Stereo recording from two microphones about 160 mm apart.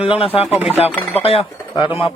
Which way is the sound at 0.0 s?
35° left (ahead or behind).